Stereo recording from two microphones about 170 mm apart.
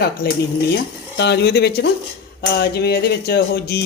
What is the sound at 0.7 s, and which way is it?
Speech, 75° left (ahead or behind).